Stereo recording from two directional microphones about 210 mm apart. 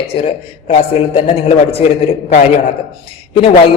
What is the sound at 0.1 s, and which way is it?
Speech, 30° left (ahead or behind).